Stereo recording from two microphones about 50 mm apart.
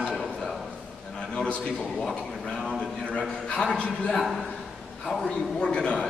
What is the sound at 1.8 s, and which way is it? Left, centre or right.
Speech, centre.